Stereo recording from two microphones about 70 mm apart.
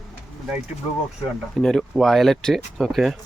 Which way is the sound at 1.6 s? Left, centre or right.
Centre.